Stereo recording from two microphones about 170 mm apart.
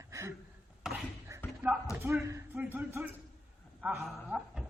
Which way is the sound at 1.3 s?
15° right (ahead or behind).